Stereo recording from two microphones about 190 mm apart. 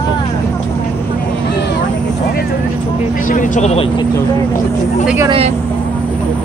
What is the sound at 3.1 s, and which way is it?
Speech, 45° left (ahead or behind).